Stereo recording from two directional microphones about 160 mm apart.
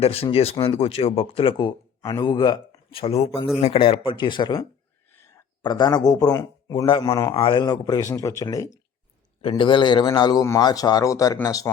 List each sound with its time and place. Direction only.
0.0 s speech: 35° left (ahead or behind)
2.0 s speech: 20° left (ahead or behind)
5.6 s speech: 25° left (ahead or behind)
9.4 s speech: 35° left (ahead or behind)